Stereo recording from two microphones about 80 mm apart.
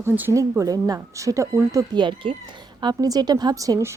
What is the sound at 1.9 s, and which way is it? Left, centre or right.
Speech, right.